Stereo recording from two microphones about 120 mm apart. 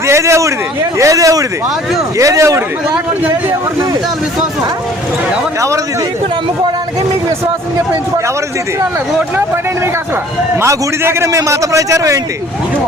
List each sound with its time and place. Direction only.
0.1 s a man's voice: 25° right (ahead or behind)
5.5 s a man's voice: 25° right (ahead or behind)
10.6 s a man's voice: 20° right (ahead or behind)